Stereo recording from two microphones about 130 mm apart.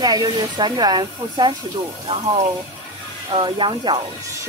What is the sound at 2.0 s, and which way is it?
Speech, 45° right (ahead or behind).